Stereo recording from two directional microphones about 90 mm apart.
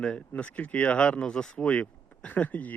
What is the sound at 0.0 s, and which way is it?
Speech, 10° left (ahead or behind).